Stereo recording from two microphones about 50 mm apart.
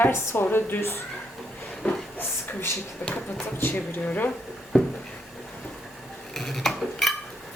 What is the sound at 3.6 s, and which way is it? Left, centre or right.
Speech, left.